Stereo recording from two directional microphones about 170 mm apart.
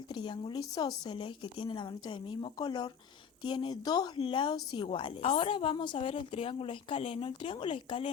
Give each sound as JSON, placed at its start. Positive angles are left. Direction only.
{"t": 0.1, "sound": "a woman's voice", "side_deg": 30}